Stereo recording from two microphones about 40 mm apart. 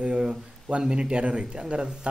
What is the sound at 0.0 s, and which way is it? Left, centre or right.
A man's voice, right.